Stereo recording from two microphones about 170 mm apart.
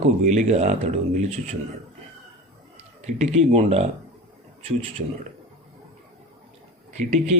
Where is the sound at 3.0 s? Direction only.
40° right (ahead or behind).